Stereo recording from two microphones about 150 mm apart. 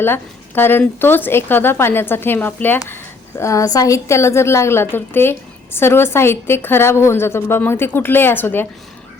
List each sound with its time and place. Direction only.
0.0 s a woman's voice: 15° left (ahead or behind)